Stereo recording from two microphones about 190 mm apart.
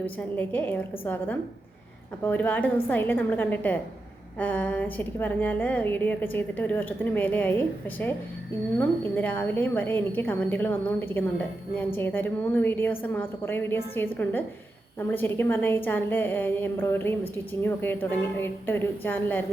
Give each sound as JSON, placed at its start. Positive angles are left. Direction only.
{"t": 0.0, "sound": "a woman's voice", "side_deg": 10}